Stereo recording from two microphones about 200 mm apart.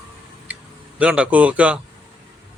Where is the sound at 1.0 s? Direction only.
5° right (ahead or behind).